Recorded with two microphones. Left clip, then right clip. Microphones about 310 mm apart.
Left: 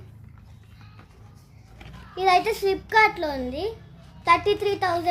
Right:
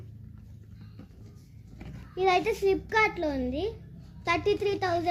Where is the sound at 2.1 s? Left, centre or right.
Centre.